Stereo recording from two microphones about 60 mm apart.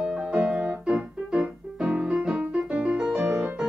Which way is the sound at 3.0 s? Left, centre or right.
Centre.